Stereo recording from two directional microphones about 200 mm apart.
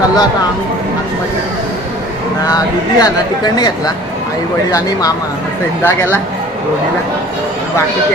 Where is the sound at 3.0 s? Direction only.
20° left (ahead or behind).